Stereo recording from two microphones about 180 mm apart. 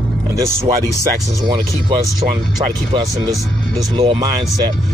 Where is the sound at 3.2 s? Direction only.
20° right (ahead or behind).